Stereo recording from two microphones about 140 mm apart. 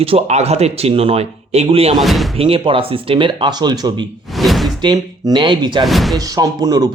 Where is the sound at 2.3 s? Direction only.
40° right (ahead or behind).